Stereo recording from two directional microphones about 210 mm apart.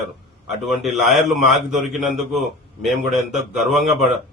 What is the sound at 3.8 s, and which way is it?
Speech, 35° right (ahead or behind).